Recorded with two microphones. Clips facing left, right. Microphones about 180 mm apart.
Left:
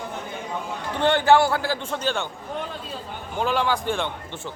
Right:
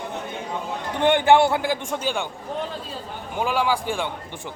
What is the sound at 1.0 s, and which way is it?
Speech, 15° right (ahead or behind).